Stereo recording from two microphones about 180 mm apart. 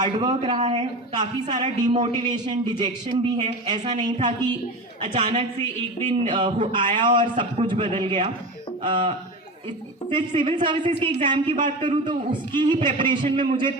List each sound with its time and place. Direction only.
0.0 s a man's voice: 25° right (ahead or behind)